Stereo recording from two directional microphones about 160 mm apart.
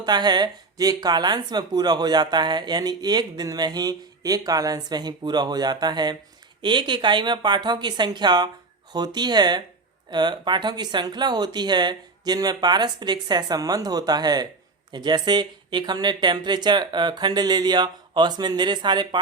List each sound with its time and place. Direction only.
0.0 s speech: 25° right (ahead or behind)